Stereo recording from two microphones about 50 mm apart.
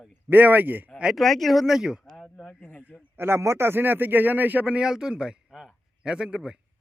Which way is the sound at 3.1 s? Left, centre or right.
Right.